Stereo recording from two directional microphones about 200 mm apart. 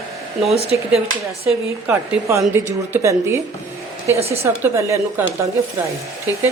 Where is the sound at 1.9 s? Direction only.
15° right (ahead or behind).